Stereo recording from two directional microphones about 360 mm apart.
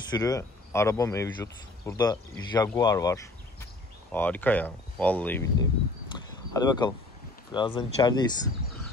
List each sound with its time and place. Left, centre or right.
0.1 s speech: centre
6.1 s a sound: centre
7.5 s speech: centre